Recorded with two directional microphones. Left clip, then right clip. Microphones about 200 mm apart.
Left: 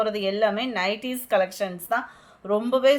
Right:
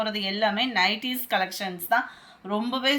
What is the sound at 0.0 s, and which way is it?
Speech, 60° left (ahead or behind).